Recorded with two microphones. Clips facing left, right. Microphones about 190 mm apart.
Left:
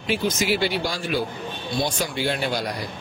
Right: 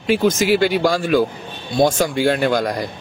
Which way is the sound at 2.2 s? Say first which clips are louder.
Right 8 dB; 50° right (ahead or behind).